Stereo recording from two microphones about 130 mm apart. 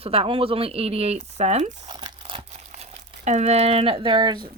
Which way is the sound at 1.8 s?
40° right (ahead or behind).